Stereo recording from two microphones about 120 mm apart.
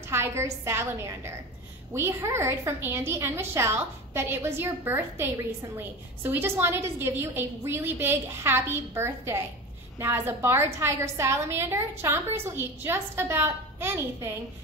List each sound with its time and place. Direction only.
0.1 s a woman's voice: 20° right (ahead or behind)